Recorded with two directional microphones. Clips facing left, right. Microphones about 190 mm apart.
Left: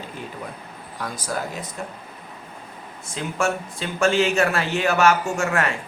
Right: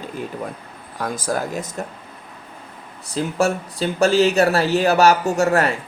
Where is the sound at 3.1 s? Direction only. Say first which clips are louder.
Right 5 dB; 35° right (ahead or behind).